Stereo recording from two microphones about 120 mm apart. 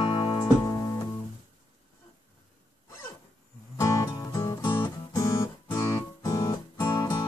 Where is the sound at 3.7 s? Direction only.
25° left (ahead or behind).